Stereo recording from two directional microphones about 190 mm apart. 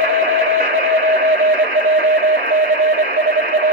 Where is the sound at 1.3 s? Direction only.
55° right (ahead or behind).